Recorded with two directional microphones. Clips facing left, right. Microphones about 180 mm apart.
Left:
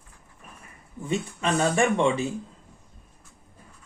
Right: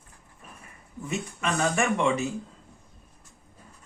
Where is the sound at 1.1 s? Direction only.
30° left (ahead or behind).